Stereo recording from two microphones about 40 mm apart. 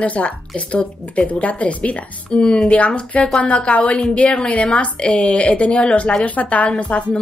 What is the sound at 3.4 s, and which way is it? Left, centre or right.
Speech, left.